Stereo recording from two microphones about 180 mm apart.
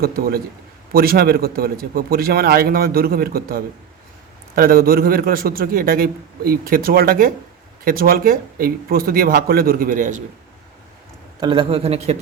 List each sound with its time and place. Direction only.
0.0 s a man's voice: 55° right (ahead or behind)
11.3 s speech: 25° right (ahead or behind)